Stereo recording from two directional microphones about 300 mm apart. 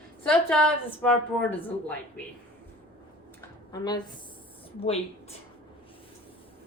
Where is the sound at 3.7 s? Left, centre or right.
Centre.